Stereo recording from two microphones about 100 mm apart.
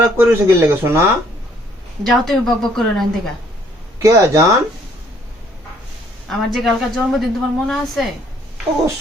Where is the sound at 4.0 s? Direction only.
30° right (ahead or behind).